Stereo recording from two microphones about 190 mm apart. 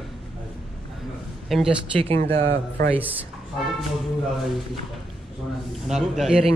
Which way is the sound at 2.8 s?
55° right (ahead or behind).